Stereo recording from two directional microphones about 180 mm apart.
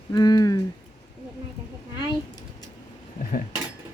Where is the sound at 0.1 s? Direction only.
20° left (ahead or behind).